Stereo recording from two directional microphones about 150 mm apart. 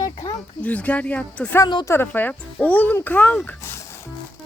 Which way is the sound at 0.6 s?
10° left (ahead or behind).